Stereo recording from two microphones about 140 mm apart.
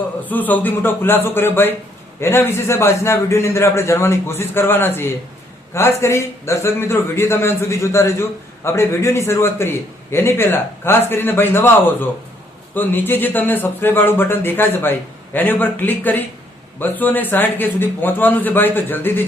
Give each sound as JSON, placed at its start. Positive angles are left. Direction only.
{"t": 0.3, "sound": "a man's voice", "side_deg": 10}